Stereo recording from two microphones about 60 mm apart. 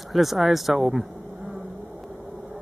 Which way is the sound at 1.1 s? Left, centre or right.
Right.